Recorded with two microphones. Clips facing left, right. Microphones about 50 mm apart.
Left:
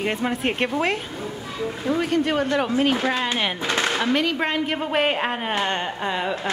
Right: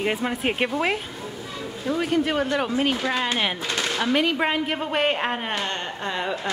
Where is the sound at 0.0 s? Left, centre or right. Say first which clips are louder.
Left 1 dB; centre.